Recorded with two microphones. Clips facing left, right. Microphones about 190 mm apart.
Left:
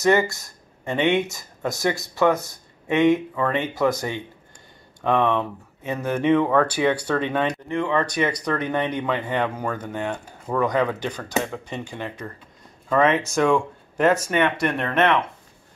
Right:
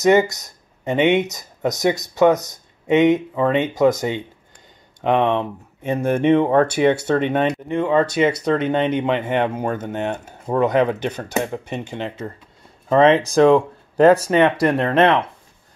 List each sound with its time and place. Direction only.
0.0 s speech: 20° right (ahead or behind)